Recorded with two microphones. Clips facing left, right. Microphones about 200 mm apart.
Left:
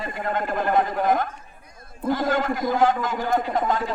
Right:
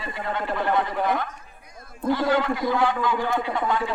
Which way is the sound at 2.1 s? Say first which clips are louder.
Right 1 dB; 45° left (ahead or behind).